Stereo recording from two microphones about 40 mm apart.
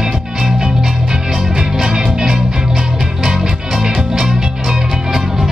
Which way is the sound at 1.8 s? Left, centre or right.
Centre.